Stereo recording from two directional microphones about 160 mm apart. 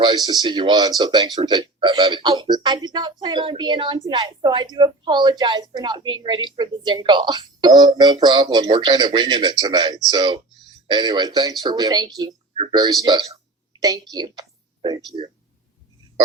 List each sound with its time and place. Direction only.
0.0 s a woman's voice: 25° right (ahead or behind)